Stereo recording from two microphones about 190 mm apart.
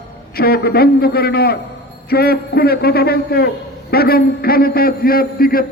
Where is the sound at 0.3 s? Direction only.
55° left (ahead or behind).